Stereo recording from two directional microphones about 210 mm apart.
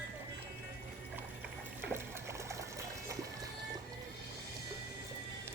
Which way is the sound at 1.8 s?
10° right (ahead or behind).